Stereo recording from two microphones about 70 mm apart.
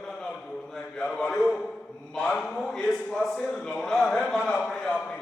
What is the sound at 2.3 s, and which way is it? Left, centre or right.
A man's voice, centre.